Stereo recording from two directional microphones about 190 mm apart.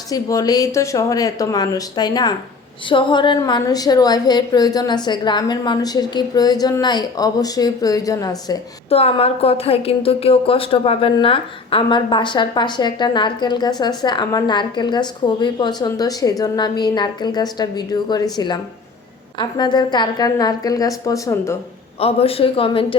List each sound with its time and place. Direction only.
0.1 s speech: 20° left (ahead or behind)
8.9 s speech: 30° left (ahead or behind); by 21.6 s 15° left (ahead or behind)
21.9 s speech: 30° left (ahead or behind)